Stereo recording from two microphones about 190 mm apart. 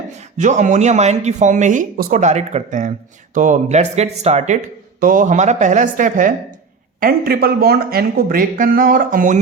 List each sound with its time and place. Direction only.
0.2 s speech: 40° right (ahead or behind)